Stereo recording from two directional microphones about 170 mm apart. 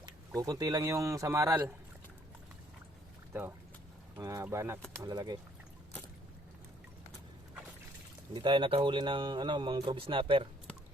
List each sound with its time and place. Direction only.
0.3 s speech: 20° right (ahead or behind)
4.2 s speech: 20° right (ahead or behind)
8.3 s speech: 25° right (ahead or behind)